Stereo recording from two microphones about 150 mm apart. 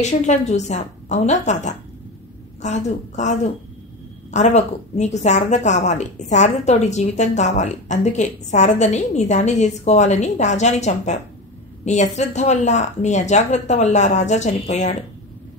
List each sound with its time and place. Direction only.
0.0 s a woman's voice: 50° left (ahead or behind)